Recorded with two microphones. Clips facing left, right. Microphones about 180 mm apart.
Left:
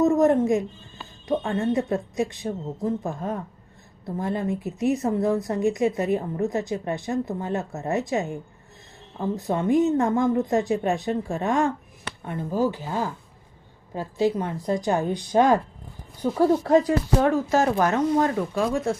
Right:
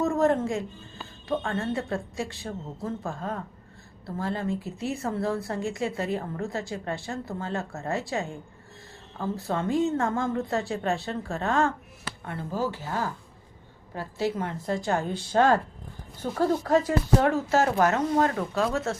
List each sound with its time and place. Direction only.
0.0 s a woman's voice: 20° left (ahead or behind)